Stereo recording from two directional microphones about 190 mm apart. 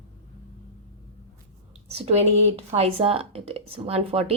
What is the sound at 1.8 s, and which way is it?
A woman's voice, 30° right (ahead or behind).